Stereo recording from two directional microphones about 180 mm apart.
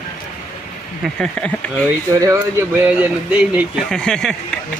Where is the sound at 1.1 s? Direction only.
5° left (ahead or behind).